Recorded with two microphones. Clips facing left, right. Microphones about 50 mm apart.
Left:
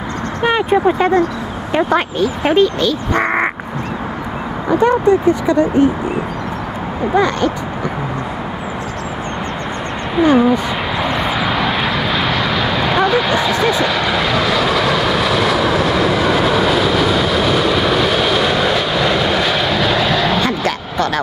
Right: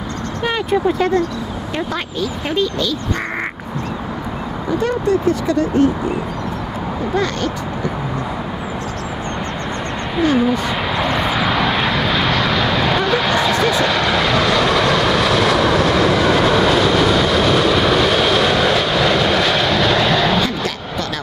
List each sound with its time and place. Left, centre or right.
0.4 s speech: centre
1.8 s speech: left
4.6 s speech: left
10.2 s vehicle: centre
20.4 s vehicle: left